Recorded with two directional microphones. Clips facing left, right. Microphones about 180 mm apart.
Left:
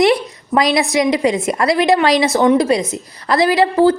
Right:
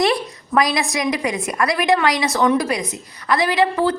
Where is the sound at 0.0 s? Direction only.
20° left (ahead or behind).